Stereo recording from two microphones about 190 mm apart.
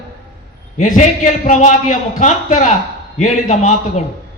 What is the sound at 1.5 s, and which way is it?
A man's voice, 40° left (ahead or behind).